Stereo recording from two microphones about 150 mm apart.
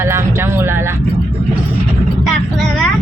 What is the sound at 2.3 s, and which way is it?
Speech, centre (ahead or behind).